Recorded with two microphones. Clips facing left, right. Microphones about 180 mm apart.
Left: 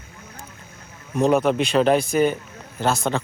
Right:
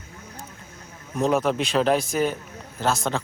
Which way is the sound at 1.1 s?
Centre (ahead or behind).